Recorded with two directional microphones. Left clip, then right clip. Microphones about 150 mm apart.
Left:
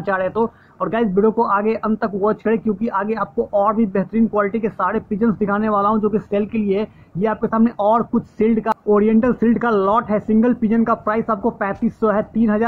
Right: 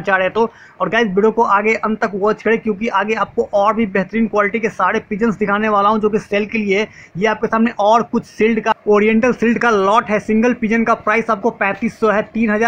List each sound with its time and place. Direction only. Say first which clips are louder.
0.1 s speech: right 4 dB; 15° right (ahead or behind)